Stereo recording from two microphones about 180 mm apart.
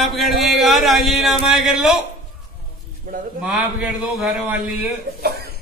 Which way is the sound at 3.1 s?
50° right (ahead or behind).